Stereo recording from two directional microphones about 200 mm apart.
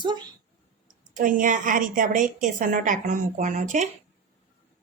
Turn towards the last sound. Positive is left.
turn(degrees=-35)  # may be behind; listen again after turning